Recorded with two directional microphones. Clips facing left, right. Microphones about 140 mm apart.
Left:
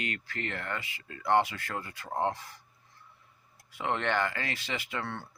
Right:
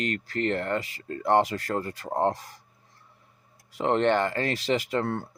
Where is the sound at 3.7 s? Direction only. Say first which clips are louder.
Right 7 dB; 35° right (ahead or behind).